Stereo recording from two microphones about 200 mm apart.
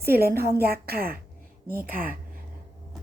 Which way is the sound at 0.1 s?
50° right (ahead or behind).